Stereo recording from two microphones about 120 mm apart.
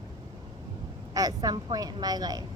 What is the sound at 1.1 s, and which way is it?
Speech, 30° right (ahead or behind).